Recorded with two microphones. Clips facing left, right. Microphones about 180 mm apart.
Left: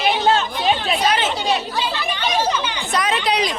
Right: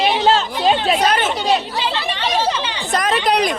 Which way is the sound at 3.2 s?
55° right (ahead or behind).